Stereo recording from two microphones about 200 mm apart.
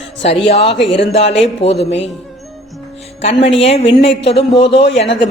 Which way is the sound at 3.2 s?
30° left (ahead or behind).